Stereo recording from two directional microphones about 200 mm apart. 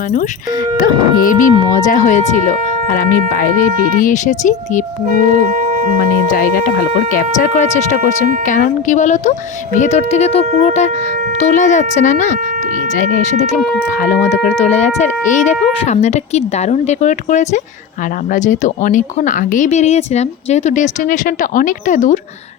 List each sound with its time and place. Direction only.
0.8 s speech: 45° left (ahead or behind)
6.3 s speech: 45° left (ahead or behind)
14.0 s speech: 40° left (ahead or behind)